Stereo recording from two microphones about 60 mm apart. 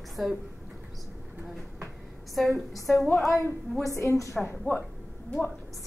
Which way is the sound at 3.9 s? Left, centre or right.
Left.